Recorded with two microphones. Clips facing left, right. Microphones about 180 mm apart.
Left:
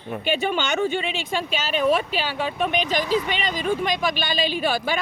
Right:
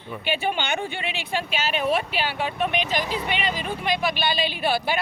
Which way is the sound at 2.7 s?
45° left (ahead or behind).